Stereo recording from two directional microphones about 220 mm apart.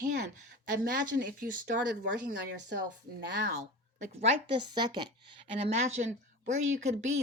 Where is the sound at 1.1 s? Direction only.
50° right (ahead or behind).